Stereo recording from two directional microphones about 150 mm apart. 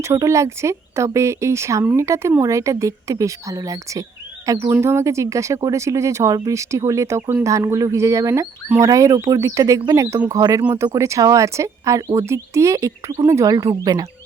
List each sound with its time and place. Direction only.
0.0 s speech: 20° right (ahead or behind)
10.6 s speech: 10° right (ahead or behind)
10.8 s speech: 20° right (ahead or behind)